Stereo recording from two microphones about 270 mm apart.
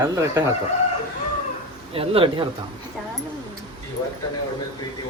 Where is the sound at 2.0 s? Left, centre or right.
Centre.